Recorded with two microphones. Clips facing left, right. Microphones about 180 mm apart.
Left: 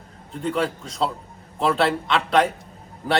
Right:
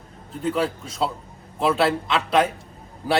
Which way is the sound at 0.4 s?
5° right (ahead or behind).